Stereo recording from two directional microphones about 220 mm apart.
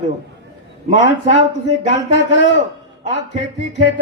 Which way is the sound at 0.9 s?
55° left (ahead or behind).